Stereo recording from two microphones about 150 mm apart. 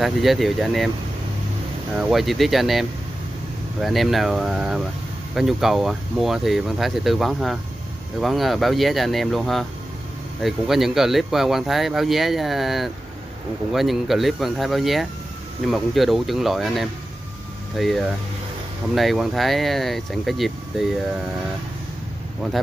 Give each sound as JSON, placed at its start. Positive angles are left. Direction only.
{"t": 0.0, "sound": "speech", "side_deg": 0}
{"t": 2.0, "sound": "speech", "side_deg": 0}
{"t": 22.4, "sound": "speech", "side_deg": 0}